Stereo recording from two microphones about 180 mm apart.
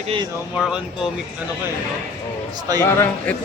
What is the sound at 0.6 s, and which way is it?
Speech, 5° right (ahead or behind).